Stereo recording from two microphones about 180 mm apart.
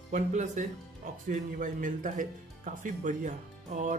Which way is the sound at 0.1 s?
40° right (ahead or behind).